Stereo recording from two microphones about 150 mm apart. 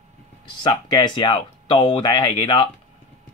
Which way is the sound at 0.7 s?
30° left (ahead or behind).